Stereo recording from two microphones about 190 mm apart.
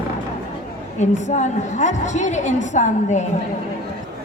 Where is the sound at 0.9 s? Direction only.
40° left (ahead or behind).